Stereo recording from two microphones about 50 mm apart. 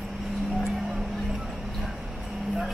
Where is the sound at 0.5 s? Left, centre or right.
Centre.